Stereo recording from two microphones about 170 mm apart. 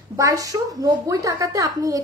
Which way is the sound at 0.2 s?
20° right (ahead or behind).